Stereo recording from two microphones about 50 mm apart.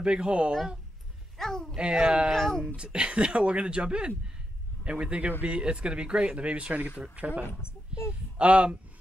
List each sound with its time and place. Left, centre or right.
0.0 s speech: centre
1.4 s speech: centre
1.8 s speech: centre
2.3 s speech: centre
2.6 s speech: centre